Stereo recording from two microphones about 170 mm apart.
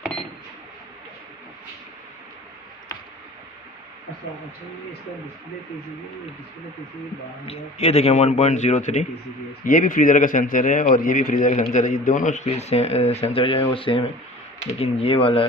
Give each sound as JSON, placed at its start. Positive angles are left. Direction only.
{"t": 7.4, "sound": "a man's voice", "side_deg": 40}